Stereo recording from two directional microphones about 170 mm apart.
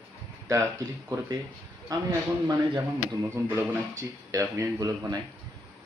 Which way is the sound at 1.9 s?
20° right (ahead or behind).